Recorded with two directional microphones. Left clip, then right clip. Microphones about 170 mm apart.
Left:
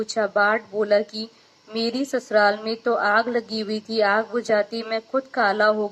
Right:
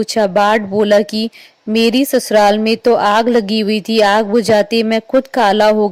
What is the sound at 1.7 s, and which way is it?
Speech, 15° right (ahead or behind).